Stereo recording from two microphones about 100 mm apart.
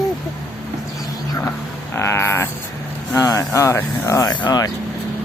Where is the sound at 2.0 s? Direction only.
25° left (ahead or behind).